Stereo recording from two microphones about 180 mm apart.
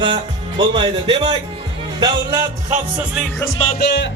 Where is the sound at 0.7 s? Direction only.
25° right (ahead or behind).